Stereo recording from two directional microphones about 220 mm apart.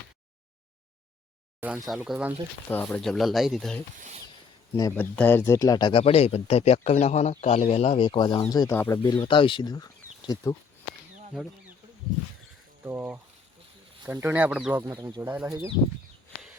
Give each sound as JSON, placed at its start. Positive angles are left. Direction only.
{"t": 1.6, "sound": "speech", "side_deg": -5}
{"t": 2.6, "sound": "speech", "side_deg": 5}
{"t": 4.7, "sound": "speech", "side_deg": 10}
{"t": 9.1, "sound": "speech", "side_deg": 25}
{"t": 12.8, "sound": "speech", "side_deg": -10}